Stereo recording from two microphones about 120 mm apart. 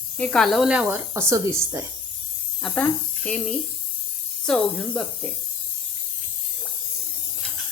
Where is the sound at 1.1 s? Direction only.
25° right (ahead or behind).